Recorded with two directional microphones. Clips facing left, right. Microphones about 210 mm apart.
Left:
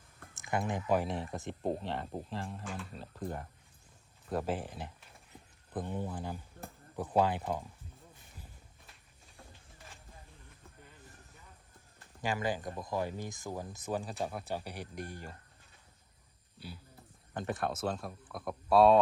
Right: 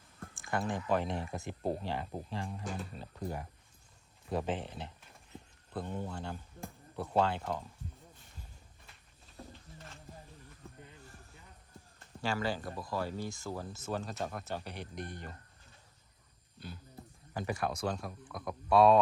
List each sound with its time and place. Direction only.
0.4 s speech: 20° left (ahead or behind)
0.9 s speech: centre (ahead or behind)
5.3 s a sound: 15° left (ahead or behind)
7.2 s speech: 15° left (ahead or behind)
12.2 s speech: 15° left (ahead or behind)
16.6 s a sound: 5° left (ahead or behind)
17.3 s speech: centre (ahead or behind)